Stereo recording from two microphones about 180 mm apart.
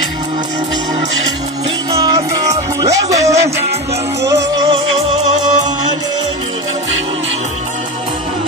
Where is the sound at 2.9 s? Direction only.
15° right (ahead or behind).